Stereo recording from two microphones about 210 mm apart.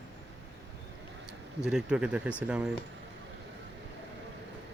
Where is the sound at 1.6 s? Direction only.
5° right (ahead or behind).